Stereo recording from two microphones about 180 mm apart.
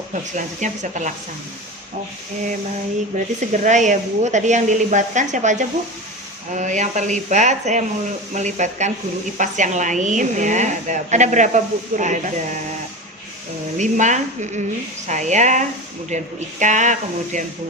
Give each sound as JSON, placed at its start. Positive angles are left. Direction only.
{"t": 0.3, "sound": "a woman's voice", "side_deg": -45}
{"t": 3.1, "sound": "a woman's voice", "side_deg": -45}
{"t": 13.7, "sound": "a woman's voice", "side_deg": -45}